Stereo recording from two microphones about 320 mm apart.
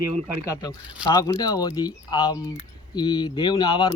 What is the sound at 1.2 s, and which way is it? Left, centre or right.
Speech, centre.